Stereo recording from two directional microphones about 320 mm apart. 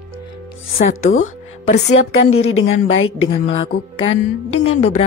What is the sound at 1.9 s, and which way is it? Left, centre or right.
A woman's voice, left.